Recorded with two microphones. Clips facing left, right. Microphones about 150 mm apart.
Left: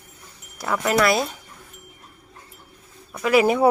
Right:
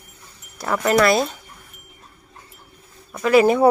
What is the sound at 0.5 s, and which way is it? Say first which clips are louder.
Speech: right 3 dB; 5° left (ahead or behind).